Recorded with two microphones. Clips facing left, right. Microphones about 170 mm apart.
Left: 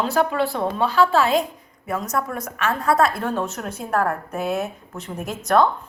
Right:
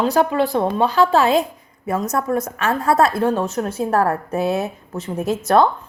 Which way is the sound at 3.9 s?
35° right (ahead or behind).